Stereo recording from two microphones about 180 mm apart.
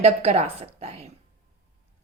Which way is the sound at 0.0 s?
35° right (ahead or behind).